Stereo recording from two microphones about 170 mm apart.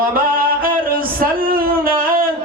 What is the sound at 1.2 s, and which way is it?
Speech, 60° right (ahead or behind).